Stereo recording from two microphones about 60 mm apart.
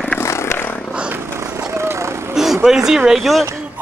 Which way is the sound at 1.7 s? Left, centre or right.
Right.